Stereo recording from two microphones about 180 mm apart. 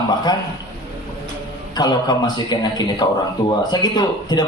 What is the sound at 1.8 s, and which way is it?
Speech, 25° left (ahead or behind).